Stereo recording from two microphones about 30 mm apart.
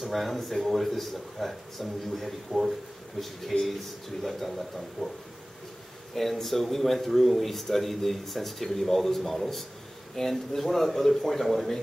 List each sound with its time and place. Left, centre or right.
0.0 s speech: centre
6.1 s speech: centre